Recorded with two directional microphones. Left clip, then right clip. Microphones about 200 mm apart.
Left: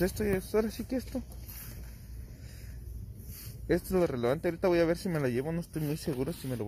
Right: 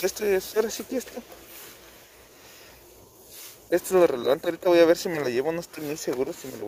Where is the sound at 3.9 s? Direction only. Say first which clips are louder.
Right 11 dB; 20° right (ahead or behind).